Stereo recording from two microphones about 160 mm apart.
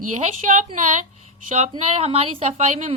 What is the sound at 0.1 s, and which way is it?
A woman's voice, 50° right (ahead or behind).